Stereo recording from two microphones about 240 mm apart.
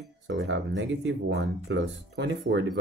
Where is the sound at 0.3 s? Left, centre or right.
Right.